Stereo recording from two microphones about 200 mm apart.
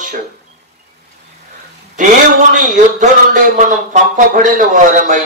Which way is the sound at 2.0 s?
40° right (ahead or behind).